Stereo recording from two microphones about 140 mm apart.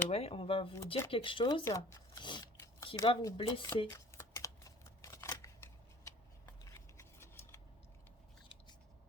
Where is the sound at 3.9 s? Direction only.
20° left (ahead or behind).